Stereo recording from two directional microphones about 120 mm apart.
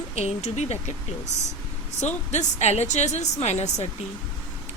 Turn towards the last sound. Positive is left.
turn(degrees=70)  # may be behind; listen again after turning